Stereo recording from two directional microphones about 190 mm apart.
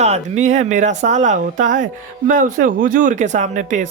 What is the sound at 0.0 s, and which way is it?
Speech, 35° right (ahead or behind).